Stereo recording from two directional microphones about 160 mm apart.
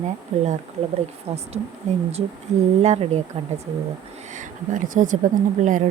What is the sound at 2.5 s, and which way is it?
Speech, 45° right (ahead or behind).